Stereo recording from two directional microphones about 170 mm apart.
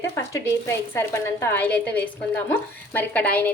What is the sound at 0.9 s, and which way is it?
A woman's voice, 15° left (ahead or behind).